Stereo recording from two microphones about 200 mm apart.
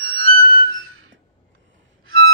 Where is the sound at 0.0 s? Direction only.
90° right.